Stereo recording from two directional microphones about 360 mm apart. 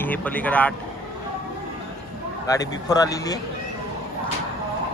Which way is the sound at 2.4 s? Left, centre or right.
Centre.